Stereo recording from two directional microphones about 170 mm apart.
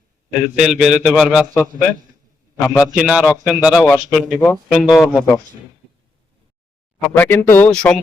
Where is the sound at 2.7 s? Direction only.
5° right (ahead or behind).